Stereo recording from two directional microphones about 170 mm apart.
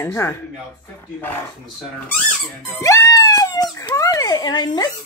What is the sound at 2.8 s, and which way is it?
Speech, 20° left (ahead or behind).